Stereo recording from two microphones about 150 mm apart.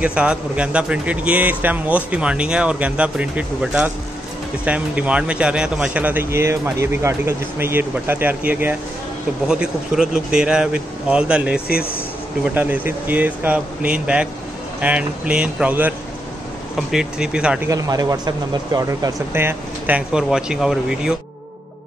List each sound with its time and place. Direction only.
0.0 s speech: 5° right (ahead or behind)
11.6 s speech: 90° left
12.5 s speech: 15° right (ahead or behind)
16.9 s speech: 5° right (ahead or behind)
17.6 s speech: 25° right (ahead or behind)
20.1 s speech: 5° right (ahead or behind)